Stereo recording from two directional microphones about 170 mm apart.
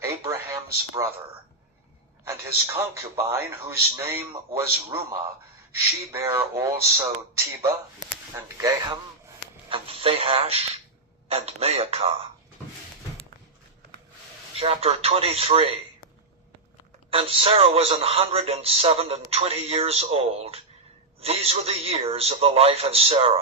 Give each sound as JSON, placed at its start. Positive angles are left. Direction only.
{"t": 0.0, "sound": "a sound", "side_deg": -20}
{"t": 2.2, "sound": "a man's voice", "side_deg": -15}
{"t": 9.6, "sound": "a man's voice", "side_deg": -30}
{"t": 14.5, "sound": "a man's voice", "side_deg": -35}
{"t": 17.1, "sound": "a man's voice", "side_deg": -35}